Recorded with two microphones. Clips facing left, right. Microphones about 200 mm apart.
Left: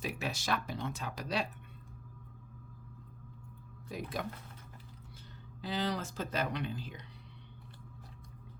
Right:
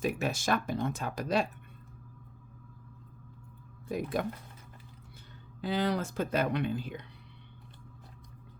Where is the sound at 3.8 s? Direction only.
55° right (ahead or behind).